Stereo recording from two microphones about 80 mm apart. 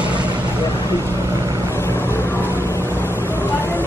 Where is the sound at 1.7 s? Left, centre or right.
Left.